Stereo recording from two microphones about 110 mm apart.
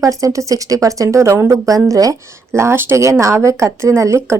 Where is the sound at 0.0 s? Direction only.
30° right (ahead or behind).